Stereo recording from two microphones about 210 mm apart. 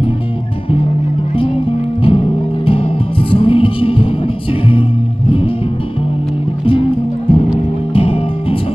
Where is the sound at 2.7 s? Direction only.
25° left (ahead or behind).